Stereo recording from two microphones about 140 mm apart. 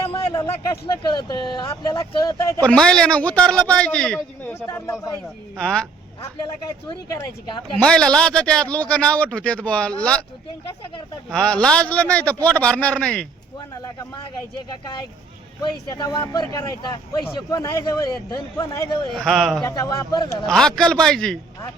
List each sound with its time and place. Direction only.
0.1 s a man's voice: 35° left (ahead or behind)
2.6 s a man's voice: 5° left (ahead or behind)
4.7 s a man's voice: 20° left (ahead or behind)
5.5 s a man's voice: 5° left (ahead or behind)
7.8 s a man's voice: 5° left (ahead or behind)
11.3 s a man's voice: 5° left (ahead or behind)
15.9 s a man's voice: 30° left (ahead or behind)
19.1 s a man's voice: 5° left (ahead or behind)
19.6 s a man's voice: 25° left (ahead or behind)
20.5 s a man's voice: 5° left (ahead or behind)